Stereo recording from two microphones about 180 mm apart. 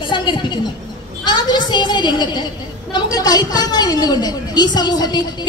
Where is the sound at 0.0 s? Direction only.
25° left (ahead or behind).